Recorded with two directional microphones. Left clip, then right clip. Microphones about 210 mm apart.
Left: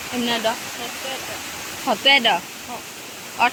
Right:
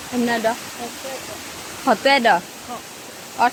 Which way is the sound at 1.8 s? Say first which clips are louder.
Right 1 dB; 40° right (ahead or behind).